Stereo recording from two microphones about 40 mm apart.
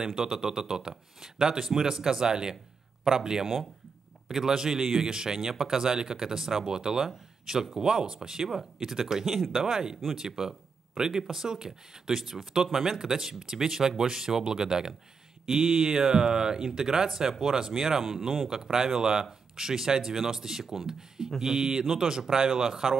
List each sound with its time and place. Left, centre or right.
0.0 s speech: centre